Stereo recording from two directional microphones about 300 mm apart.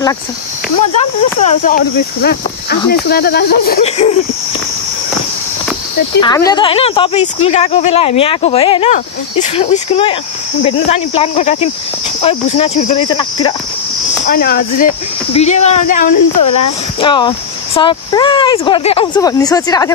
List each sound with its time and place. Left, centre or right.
1.4 s speech: left
6.2 s speech: centre
14.2 s speech: left
16.2 s speech: left
17.0 s speech: centre